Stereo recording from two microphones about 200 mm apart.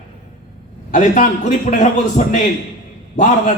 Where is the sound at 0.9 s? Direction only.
40° left (ahead or behind).